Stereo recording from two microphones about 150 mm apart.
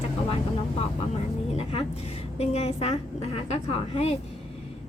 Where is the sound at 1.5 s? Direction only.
40° left (ahead or behind).